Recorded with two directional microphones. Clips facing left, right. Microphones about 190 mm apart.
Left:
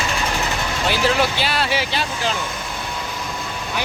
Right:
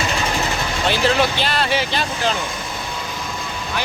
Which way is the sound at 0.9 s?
10° left (ahead or behind).